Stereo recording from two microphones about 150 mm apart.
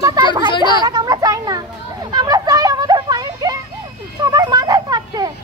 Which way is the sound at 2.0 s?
25° right (ahead or behind).